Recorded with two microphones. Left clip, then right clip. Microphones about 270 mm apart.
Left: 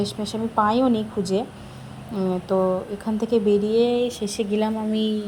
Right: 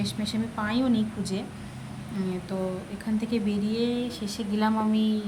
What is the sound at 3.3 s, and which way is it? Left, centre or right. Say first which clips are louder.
A woman's voice: left 14 dB; centre.